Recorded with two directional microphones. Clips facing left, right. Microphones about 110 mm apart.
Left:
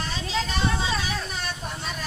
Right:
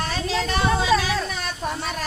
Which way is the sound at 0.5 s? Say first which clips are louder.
Right 10 dB; 70° right (ahead or behind).